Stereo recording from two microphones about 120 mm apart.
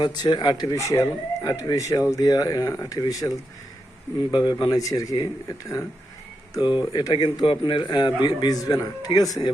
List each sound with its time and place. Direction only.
0.0 s a man's voice: 40° left (ahead or behind)